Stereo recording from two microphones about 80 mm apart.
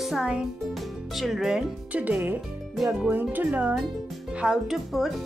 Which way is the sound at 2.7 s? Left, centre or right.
Centre.